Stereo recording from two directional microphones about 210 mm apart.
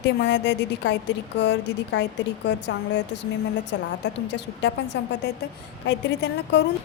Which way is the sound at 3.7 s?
60° left (ahead or behind).